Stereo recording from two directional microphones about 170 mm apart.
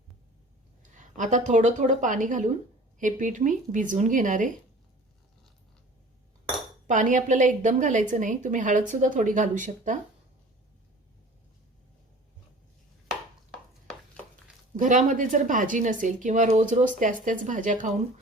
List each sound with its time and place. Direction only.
0.8 s a woman's voice: 45° right (ahead or behind)
6.8 s a woman's voice: 50° right (ahead or behind)
13.9 s a sound: 5° left (ahead or behind)
14.8 s a woman's voice: 50° right (ahead or behind)